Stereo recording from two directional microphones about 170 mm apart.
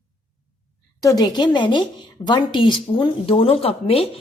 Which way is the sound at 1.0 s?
20° left (ahead or behind).